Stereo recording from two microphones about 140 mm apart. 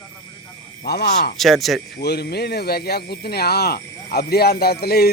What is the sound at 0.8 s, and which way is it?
Speech, 90° left.